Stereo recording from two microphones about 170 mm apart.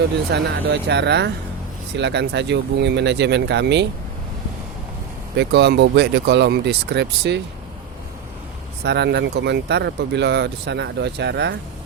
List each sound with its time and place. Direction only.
0.3 s speech: 75° right (ahead or behind); by 3.8 s 90° right
5.4 s speech: 90° right
8.8 s speech: 80° right